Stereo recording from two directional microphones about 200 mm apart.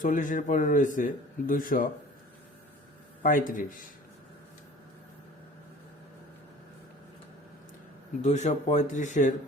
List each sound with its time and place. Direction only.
0.0 s a man's voice: 40° left (ahead or behind)
3.2 s a man's voice: 40° left (ahead or behind)
8.2 s a man's voice: 35° left (ahead or behind)